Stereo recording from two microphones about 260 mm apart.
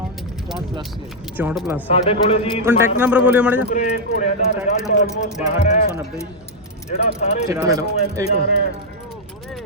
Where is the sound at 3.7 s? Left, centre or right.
Left.